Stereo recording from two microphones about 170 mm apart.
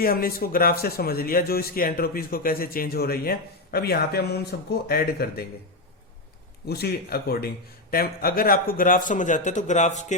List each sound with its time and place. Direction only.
0.0 s speech: 60° left (ahead or behind)
6.7 s a man's voice: 65° left (ahead or behind); by 10.2 s 45° left (ahead or behind)